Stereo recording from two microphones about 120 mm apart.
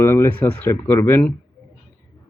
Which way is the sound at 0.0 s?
20° left (ahead or behind).